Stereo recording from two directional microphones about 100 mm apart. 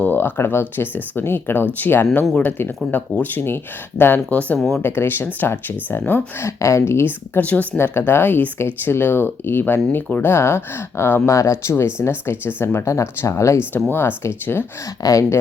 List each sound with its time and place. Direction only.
0.0 s speech: 20° left (ahead or behind)
4.5 s speech: centre (ahead or behind)
4.8 s speech: 20° left (ahead or behind)
15.0 s speech: 35° left (ahead or behind)